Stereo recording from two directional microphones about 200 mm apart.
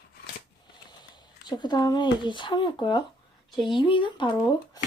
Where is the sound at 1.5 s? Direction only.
20° left (ahead or behind).